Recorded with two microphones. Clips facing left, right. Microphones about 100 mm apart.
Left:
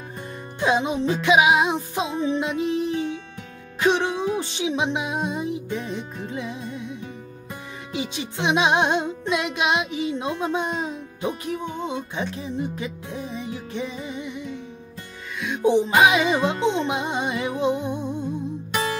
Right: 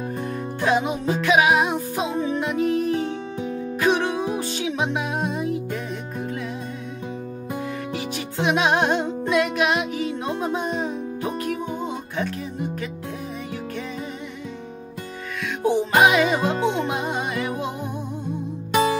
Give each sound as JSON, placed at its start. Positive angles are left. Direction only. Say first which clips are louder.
{"t": 0.6, "sound": "music", "louder": "left 1 dB", "side_deg": 20}
{"t": 7.9, "sound": "music", "louder": "right 1 dB", "side_deg": 20}
{"t": 15.4, "sound": "music", "louder": "left 2 dB", "side_deg": 20}